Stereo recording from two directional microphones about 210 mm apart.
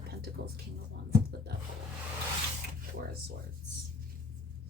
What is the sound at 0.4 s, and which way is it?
Speech, 45° right (ahead or behind).